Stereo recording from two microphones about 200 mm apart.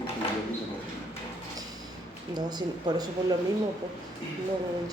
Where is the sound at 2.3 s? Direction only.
20° right (ahead or behind).